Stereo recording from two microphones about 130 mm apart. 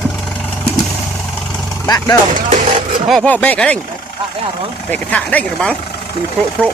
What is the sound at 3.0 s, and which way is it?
Speech, centre (ahead or behind).